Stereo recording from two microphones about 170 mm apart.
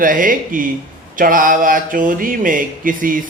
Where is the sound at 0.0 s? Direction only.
55° right (ahead or behind).